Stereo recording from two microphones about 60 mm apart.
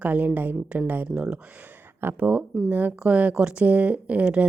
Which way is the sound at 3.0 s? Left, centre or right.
Right.